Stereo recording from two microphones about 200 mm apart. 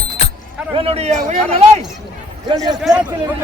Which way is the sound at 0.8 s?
30° right (ahead or behind).